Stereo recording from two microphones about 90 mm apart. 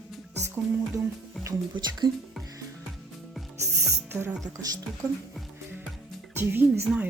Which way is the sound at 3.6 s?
35° right (ahead or behind).